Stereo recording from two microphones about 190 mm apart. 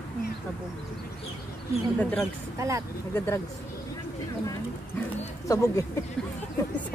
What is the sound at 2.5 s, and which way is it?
Speech, 15° right (ahead or behind).